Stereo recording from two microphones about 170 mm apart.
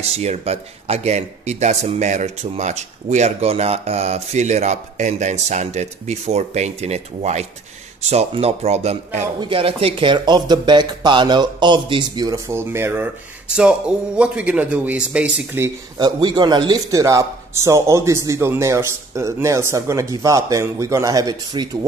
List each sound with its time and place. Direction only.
0.0 s a man's voice: 40° right (ahead or behind); by 15.7 s 10° right (ahead or behind)
16.0 s a man's voice: 25° right (ahead or behind)